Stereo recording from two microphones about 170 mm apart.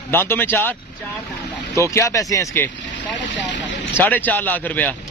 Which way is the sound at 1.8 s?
20° left (ahead or behind).